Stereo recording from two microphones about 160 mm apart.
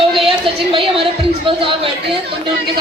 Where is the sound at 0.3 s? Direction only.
35° right (ahead or behind).